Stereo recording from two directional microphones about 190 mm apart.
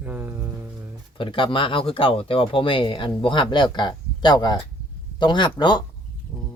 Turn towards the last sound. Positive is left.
turn(degrees=25)  # may be behind; listen again after turning